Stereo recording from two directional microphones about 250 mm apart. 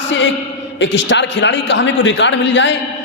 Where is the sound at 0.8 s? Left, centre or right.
Left.